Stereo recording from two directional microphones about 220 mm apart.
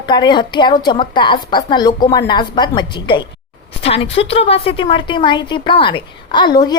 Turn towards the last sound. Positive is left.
turn(degrees=20)  # may be behind; listen again after turning